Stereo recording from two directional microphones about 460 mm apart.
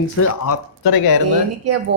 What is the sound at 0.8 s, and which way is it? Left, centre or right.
Speech, left.